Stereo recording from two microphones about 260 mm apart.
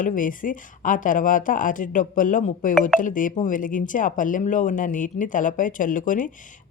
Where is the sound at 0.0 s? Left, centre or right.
Left.